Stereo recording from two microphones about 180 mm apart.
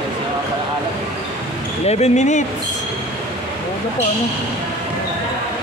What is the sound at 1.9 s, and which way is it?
Speech, 40° left (ahead or behind).